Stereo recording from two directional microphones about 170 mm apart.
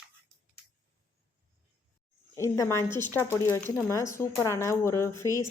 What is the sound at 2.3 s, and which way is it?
Speech, 15° left (ahead or behind).